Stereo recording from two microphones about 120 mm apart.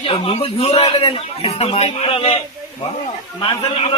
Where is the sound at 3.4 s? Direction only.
50° left (ahead or behind).